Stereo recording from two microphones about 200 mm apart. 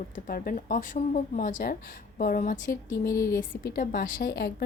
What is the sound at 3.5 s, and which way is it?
A woman's voice, 50° left (ahead or behind).